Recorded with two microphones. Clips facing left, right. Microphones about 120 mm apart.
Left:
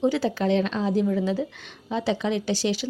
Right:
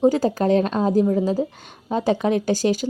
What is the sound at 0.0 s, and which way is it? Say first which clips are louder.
A woman's voice: right 5 dB; 40° right (ahead or behind).